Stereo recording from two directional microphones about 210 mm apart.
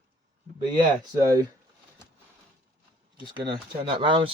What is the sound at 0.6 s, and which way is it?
Speech, 20° right (ahead or behind).